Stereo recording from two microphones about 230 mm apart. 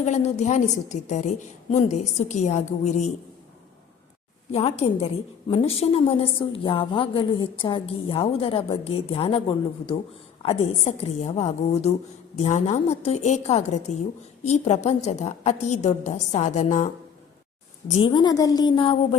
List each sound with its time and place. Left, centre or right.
0.0 s a woman's voice: left
4.5 s a woman's voice: left
17.8 s a woman's voice: left